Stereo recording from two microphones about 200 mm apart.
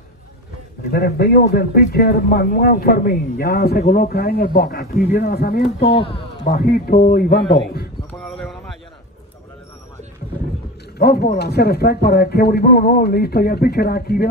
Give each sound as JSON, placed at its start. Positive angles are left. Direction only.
{"t": 0.9, "sound": "speech", "side_deg": 50}
{"t": 5.9, "sound": "speech", "side_deg": 25}
{"t": 6.4, "sound": "speech", "side_deg": 50}
{"t": 8.1, "sound": "a sound", "side_deg": 0}
{"t": 11.0, "sound": "speech", "side_deg": 50}